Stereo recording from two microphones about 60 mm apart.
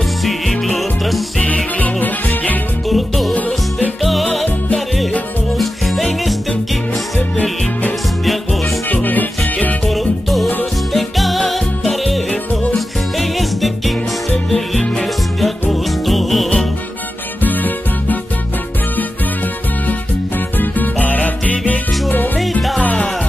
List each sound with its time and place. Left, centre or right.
0.2 s music: centre
1.8 s music: left
2.9 s music: centre
3.3 s music: left
4.0 s music: centre
8.8 s music: left
9.8 s music: centre
17.4 s music: left
19.9 s music: left